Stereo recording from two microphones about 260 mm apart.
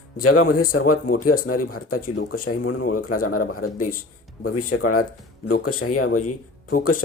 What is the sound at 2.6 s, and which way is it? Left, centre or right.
Speech, left.